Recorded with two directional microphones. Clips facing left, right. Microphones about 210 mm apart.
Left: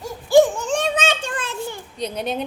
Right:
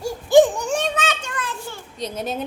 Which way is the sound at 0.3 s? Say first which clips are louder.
Even; 15° right (ahead or behind).